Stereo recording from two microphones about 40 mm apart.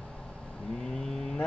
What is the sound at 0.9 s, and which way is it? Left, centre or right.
Cattle, centre.